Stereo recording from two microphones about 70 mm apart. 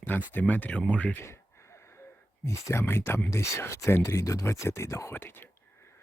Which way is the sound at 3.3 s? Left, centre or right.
Left.